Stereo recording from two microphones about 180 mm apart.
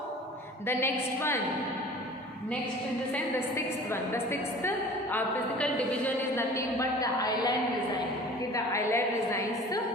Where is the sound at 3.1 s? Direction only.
15° left (ahead or behind).